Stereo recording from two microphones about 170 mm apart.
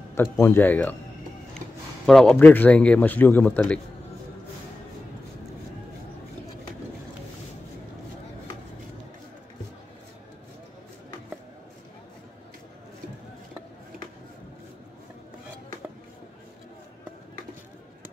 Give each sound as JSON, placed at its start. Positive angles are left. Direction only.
{"t": 0.1, "sound": "speech", "side_deg": 15}
{"t": 2.0, "sound": "speech", "side_deg": 5}